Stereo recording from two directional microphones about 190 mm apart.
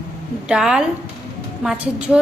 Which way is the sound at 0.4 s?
5° right (ahead or behind).